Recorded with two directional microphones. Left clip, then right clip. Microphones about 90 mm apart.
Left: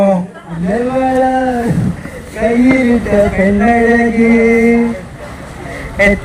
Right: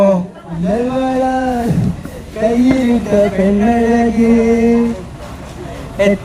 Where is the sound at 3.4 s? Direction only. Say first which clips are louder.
Left 3 dB; 25° right (ahead or behind).